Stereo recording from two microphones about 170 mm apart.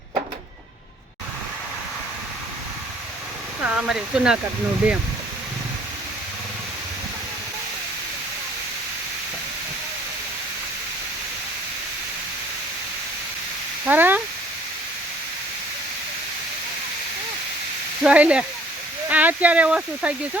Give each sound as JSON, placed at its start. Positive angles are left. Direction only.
{"t": 3.6, "sound": "speech", "side_deg": -5}
{"t": 13.8, "sound": "a sound", "side_deg": -10}
{"t": 18.0, "sound": "speech", "side_deg": -5}